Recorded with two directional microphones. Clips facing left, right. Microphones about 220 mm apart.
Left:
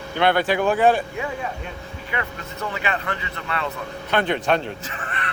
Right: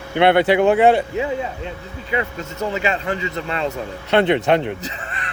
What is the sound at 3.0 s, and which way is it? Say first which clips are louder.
Speech: right 6 dB; 25° right (ahead or behind).